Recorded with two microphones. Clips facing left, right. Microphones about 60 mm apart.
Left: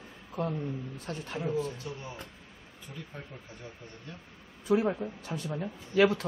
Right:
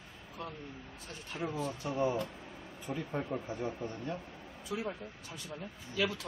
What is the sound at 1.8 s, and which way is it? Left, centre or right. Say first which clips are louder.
Speech: right 4 dB; right.